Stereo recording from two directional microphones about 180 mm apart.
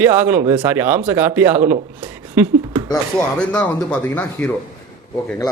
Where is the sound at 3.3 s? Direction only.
5° left (ahead or behind).